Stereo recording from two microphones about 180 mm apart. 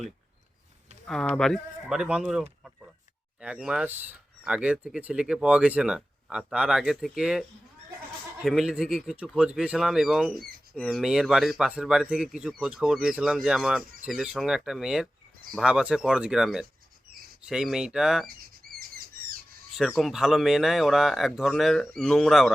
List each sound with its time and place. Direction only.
1.0 s speech: 5° left (ahead or behind)
8.4 s speech: centre (ahead or behind)
18.7 s chirp: 55° right (ahead or behind)
19.7 s speech: centre (ahead or behind)